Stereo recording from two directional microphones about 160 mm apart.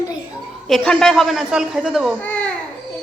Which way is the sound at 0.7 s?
5° left (ahead or behind).